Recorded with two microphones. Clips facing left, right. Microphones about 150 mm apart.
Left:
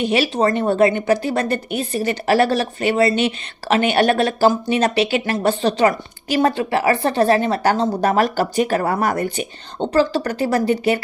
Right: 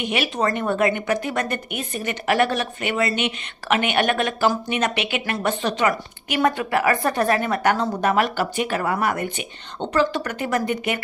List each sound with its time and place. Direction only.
0.0 s speech: 35° left (ahead or behind)